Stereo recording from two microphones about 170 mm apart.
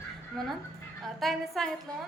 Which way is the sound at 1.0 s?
Centre (ahead or behind).